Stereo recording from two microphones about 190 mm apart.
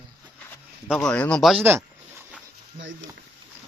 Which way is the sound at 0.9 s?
5° left (ahead or behind).